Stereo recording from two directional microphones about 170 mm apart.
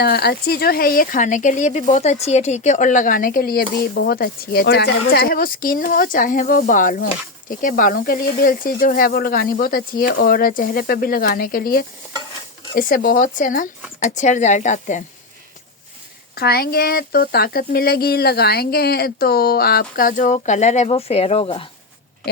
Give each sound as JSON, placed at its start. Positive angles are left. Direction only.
{"t": 0.0, "sound": "a woman's voice", "side_deg": 70}
{"t": 16.3, "sound": "speech", "side_deg": 65}